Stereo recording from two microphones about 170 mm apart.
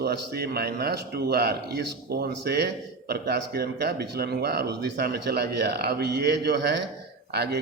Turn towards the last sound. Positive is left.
turn(degrees=-70)  # may be behind; listen again after turning